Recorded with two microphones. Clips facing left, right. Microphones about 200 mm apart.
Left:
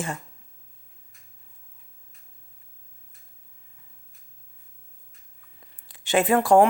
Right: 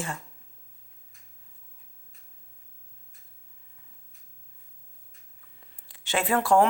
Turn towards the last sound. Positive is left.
turn(degrees=15)  # may be behind; listen again after turning